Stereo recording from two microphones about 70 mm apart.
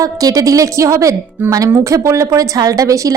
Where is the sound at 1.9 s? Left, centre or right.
Right.